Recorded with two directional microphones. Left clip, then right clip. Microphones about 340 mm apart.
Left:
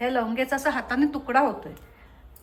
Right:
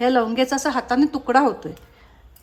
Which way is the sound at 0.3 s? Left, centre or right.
Centre.